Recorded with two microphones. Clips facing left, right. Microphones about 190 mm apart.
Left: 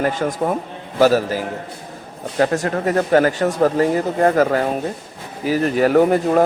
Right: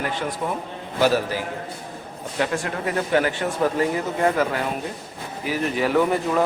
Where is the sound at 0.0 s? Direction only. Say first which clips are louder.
Left 7 dB; 45° left (ahead or behind).